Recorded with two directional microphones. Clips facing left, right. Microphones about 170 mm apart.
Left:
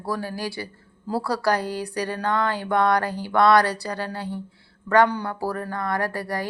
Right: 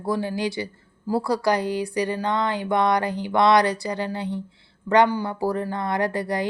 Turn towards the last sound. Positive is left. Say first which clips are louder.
# right 3 dB
turn(degrees=-20)  # may be behind; listen again after turning